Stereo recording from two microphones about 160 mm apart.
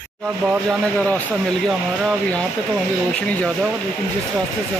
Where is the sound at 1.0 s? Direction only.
10° left (ahead or behind).